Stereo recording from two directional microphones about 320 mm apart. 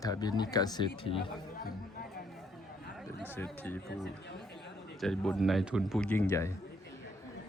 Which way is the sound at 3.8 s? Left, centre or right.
Left.